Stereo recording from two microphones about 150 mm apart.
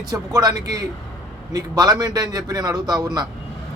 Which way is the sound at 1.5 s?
25° right (ahead or behind).